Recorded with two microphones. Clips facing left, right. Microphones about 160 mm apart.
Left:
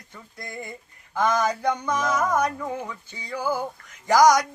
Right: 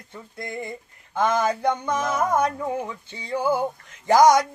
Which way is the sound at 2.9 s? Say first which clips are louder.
Right 4 dB; 30° right (ahead or behind).